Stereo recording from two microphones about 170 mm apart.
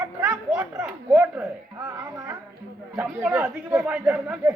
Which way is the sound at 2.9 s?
5° right (ahead or behind).